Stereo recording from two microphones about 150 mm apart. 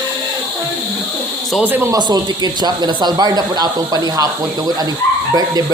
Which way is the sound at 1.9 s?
25° right (ahead or behind).